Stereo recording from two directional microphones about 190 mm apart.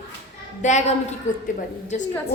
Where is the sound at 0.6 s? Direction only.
40° left (ahead or behind).